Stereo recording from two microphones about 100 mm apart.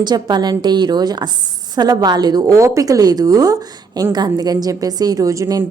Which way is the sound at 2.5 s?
30° right (ahead or behind).